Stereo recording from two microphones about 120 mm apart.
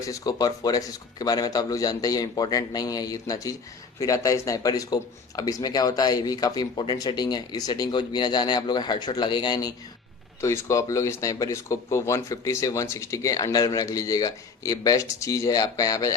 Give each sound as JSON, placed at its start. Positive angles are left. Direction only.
{"t": 0.0, "sound": "speech", "side_deg": 30}
{"t": 10.4, "sound": "speech", "side_deg": 25}